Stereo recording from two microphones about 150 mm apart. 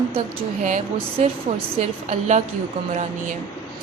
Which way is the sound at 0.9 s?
35° right (ahead or behind).